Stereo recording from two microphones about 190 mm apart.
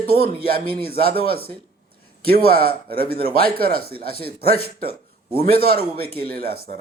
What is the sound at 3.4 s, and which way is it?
Speech, 55° right (ahead or behind).